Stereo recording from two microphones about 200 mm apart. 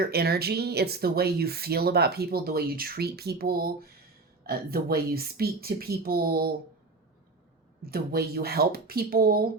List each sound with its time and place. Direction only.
0.1 s speech: 50° right (ahead or behind)
7.9 s speech: 50° right (ahead or behind)